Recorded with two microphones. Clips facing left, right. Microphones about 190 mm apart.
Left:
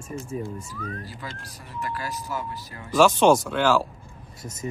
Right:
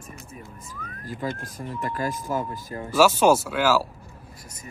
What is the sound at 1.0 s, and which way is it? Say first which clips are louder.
Speech: right 7 dB; 50° right (ahead or behind).